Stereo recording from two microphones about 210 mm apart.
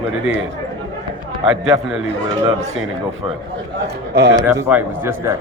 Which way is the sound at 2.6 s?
65° right (ahead or behind).